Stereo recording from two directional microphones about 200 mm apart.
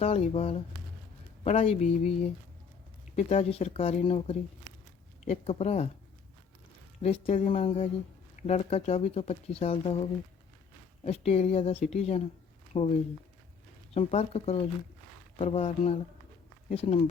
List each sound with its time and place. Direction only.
0.0 s speech: 30° left (ahead or behind)
7.0 s speech: 30° left (ahead or behind)
13.9 s speech: 30° left (ahead or behind)